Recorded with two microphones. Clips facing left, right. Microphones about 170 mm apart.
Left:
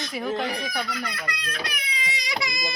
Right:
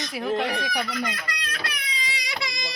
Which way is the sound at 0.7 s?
10° right (ahead or behind).